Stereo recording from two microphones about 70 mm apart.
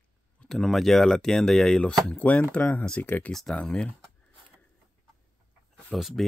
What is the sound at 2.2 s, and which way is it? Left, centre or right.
Speech, left.